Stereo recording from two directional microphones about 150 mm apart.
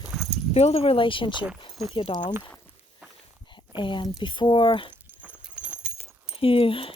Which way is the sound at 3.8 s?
30° left (ahead or behind).